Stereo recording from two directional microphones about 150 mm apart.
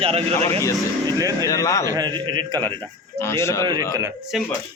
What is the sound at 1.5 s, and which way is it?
Speech, 20° left (ahead or behind).